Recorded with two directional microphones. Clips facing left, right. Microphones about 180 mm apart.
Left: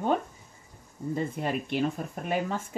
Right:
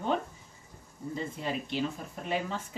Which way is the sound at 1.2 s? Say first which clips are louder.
Left 4 dB; 55° left (ahead or behind).